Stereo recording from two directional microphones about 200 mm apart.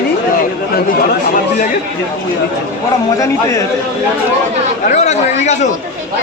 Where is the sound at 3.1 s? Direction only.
15° left (ahead or behind).